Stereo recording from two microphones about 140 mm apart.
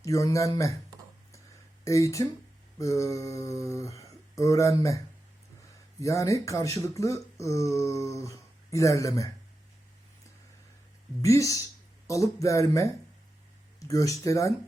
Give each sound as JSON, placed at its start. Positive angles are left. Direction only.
{"t": 0.0, "sound": "speech", "side_deg": 25}
{"t": 1.8, "sound": "speech", "side_deg": 20}
{"t": 11.2, "sound": "speech", "side_deg": 25}